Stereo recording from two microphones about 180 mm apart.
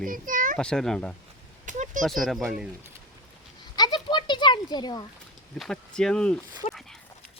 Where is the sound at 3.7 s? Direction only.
25° left (ahead or behind).